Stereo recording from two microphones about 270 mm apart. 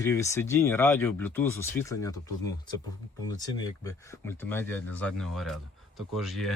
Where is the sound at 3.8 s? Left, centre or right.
Centre.